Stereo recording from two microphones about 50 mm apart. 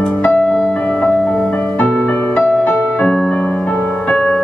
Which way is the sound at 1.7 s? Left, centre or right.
Left.